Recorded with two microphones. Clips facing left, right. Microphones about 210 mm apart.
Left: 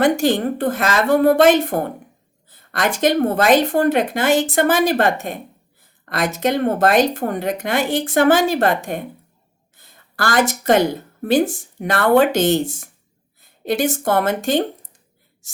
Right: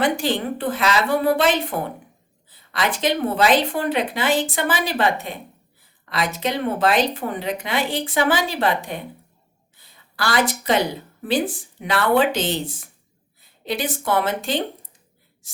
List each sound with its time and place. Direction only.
0.0 s speech: 45° left (ahead or behind)